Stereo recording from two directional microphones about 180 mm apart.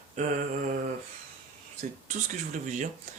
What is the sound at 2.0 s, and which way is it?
Speech, 45° right (ahead or behind).